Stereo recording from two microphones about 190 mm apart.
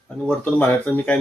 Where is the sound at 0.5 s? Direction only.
10° left (ahead or behind).